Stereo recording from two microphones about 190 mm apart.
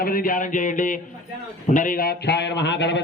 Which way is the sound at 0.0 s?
50° left (ahead or behind).